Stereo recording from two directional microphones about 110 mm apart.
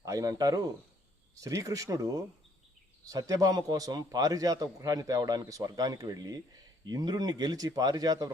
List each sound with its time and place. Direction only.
0.0 s a man's voice: 30° right (ahead or behind)